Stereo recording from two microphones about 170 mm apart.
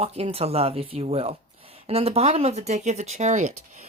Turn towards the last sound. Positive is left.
turn(degrees=-40)  # may be behind; listen again after turning